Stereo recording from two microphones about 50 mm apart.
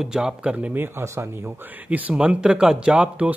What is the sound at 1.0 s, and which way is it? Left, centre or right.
Speech, right.